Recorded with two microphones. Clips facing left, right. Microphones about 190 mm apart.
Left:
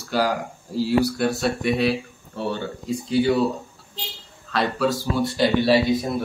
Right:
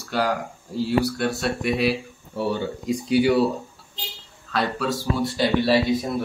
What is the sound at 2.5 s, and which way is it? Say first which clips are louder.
Speech: right 2 dB; 15° right (ahead or behind).